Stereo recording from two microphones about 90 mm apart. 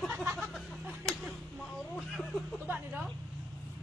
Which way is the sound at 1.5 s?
Centre (ahead or behind).